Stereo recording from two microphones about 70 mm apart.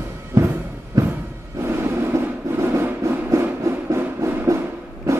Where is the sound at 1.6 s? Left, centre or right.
Right.